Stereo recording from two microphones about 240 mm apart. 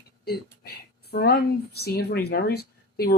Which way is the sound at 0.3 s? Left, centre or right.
Left.